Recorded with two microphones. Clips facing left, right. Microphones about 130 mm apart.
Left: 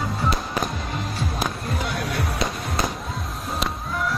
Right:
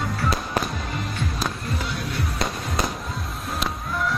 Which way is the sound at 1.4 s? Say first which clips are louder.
Left 2 dB; 55° left (ahead or behind).